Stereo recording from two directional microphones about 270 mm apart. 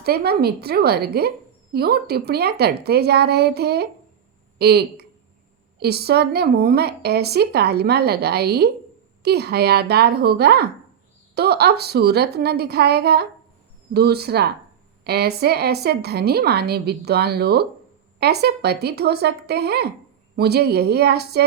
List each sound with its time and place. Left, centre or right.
0.0 s a woman's voice: right